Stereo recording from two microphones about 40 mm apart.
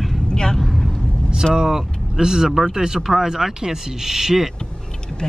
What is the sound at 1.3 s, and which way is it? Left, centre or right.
A man's voice, centre.